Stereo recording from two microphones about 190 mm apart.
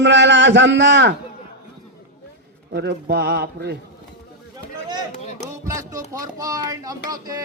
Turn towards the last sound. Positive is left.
turn(degrees=-20)  # may be behind; listen again after turning